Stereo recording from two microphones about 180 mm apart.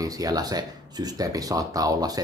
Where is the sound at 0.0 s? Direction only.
20° right (ahead or behind).